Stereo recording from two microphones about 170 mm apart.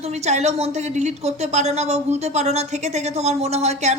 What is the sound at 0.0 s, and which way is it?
A woman's voice, 40° right (ahead or behind).